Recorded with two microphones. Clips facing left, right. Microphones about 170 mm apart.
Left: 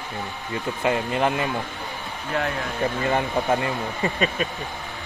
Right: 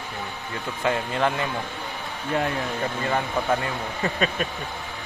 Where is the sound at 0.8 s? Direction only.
15° left (ahead or behind).